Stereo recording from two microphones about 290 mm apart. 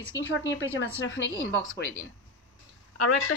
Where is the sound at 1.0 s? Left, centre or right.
Left.